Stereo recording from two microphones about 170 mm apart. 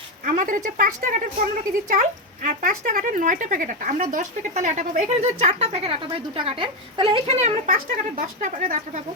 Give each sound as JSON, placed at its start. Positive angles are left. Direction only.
{"t": 0.3, "sound": "speech", "side_deg": -50}